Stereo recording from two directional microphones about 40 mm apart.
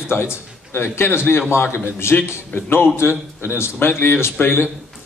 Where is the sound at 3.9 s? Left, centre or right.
Left.